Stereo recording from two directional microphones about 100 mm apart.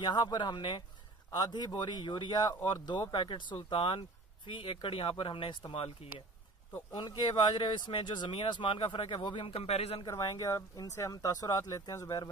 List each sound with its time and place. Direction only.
0.0 s speech: 50° left (ahead or behind)
5.8 s speech: 70° left (ahead or behind)
6.9 s speech: 50° left (ahead or behind); by 10.0 s 90° left
10.0 s speech: 35° left (ahead or behind)